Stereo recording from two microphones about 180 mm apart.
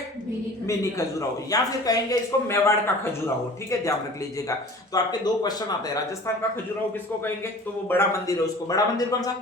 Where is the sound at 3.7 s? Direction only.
15° left (ahead or behind).